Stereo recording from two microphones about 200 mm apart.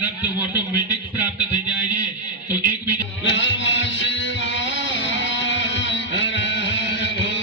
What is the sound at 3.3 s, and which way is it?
Music, 65° left (ahead or behind).